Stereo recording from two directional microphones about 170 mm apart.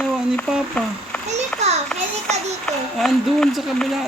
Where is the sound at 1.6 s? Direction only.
40° right (ahead or behind).